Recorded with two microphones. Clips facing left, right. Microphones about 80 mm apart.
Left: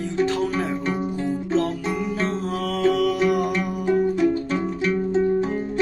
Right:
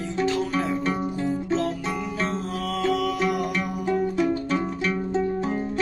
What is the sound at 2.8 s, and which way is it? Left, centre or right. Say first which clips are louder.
Music: left 5 dB; left.